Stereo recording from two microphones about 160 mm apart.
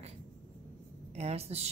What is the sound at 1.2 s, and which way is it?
Speech, 40° right (ahead or behind).